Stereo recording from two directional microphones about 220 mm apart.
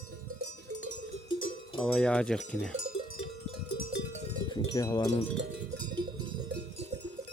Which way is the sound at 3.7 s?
50° left (ahead or behind).